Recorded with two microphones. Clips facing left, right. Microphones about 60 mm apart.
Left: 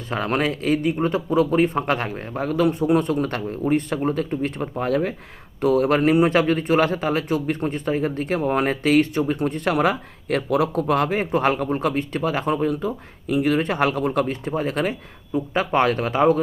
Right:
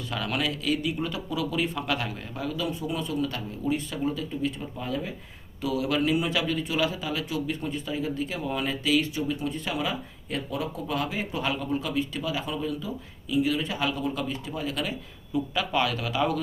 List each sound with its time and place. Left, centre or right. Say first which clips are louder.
0.1 s speech: left 7 dB; left
5.5 s speech: left 9 dB; left